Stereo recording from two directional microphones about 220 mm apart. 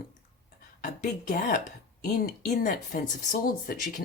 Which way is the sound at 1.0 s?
40° left (ahead or behind).